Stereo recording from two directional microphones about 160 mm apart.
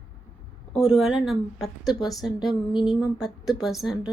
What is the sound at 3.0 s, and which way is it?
A woman's voice, centre (ahead or behind).